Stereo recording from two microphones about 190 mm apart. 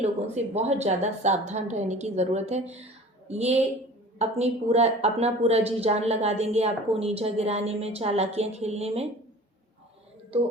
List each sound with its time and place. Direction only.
0.0 s a woman's voice: 35° right (ahead or behind)